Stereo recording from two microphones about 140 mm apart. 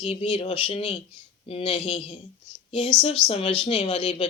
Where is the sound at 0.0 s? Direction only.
45° left (ahead or behind).